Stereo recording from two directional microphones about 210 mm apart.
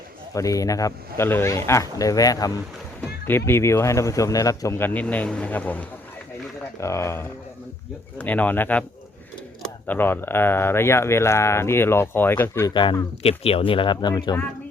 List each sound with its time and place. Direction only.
0.3 s speech: 15° left (ahead or behind)
9.8 s speech: 10° left (ahead or behind)
12.7 s speech: 20° left (ahead or behind)